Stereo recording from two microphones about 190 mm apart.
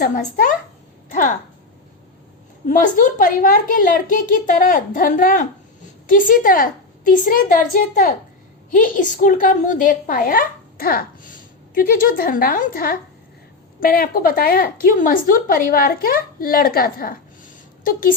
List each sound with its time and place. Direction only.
0.0 s a woman's voice: 45° left (ahead or behind)
2.6 s a woman's voice: 45° left (ahead or behind)